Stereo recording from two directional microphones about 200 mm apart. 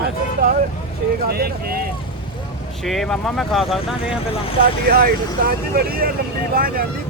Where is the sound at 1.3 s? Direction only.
50° right (ahead or behind).